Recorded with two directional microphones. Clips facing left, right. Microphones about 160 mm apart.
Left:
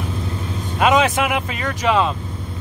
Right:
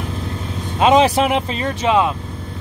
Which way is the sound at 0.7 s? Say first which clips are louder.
Right 3 dB; 30° right (ahead or behind).